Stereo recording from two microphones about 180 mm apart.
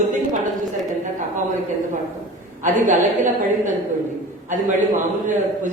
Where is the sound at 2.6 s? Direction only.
45° right (ahead or behind).